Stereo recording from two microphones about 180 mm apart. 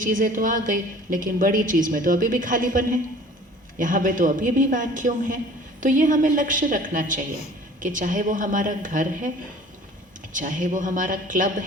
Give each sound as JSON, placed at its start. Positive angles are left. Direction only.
{"t": 0.0, "sound": "a woman's voice", "side_deg": -50}
{"t": 10.3, "sound": "a woman's voice", "side_deg": -45}